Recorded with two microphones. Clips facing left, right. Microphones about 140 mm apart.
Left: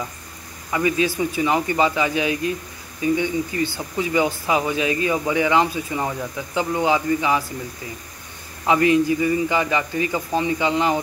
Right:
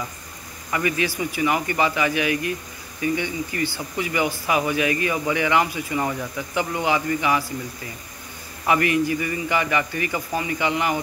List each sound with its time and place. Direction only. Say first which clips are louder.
0.7 s speech: left 3 dB; 20° left (ahead or behind)
8.6 s speech: left 3 dB; 20° left (ahead or behind)